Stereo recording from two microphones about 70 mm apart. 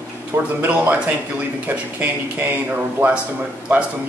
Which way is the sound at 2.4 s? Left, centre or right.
Right.